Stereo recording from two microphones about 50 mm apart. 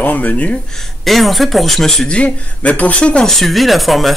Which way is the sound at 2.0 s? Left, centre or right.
Left.